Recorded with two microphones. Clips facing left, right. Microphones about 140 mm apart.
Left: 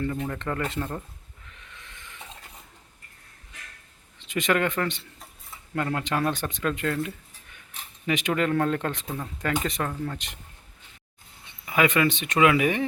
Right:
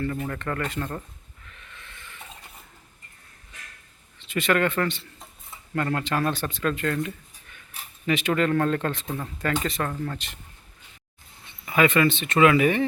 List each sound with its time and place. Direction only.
0.3 s speech: 15° left (ahead or behind)
1.5 s a sound: 15° left (ahead or behind)
4.2 s speech: 15° left (ahead or behind)
11.6 s speech: 10° left (ahead or behind)